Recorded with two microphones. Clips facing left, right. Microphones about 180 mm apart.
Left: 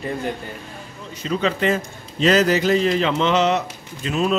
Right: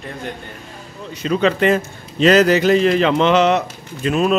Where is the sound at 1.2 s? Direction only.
70° right (ahead or behind).